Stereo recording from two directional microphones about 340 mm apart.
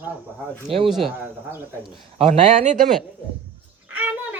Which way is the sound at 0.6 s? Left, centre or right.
Centre.